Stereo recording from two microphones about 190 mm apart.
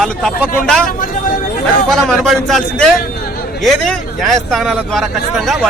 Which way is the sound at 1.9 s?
Centre (ahead or behind).